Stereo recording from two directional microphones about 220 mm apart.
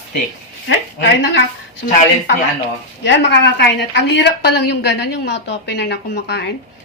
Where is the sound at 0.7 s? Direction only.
55° left (ahead or behind).